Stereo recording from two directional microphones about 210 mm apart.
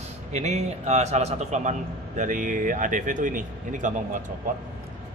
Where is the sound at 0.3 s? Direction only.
35° right (ahead or behind).